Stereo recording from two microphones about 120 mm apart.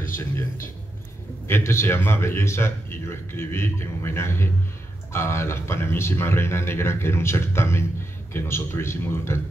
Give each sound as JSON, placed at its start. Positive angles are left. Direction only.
{"t": 0.2, "sound": "speech", "side_deg": 25}